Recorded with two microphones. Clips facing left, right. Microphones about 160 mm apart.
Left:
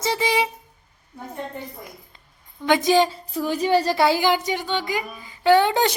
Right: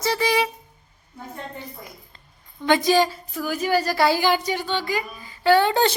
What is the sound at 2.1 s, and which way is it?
A woman's voice, 15° left (ahead or behind).